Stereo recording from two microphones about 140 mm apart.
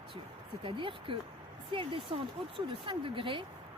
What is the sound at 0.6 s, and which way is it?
Speech, 40° right (ahead or behind).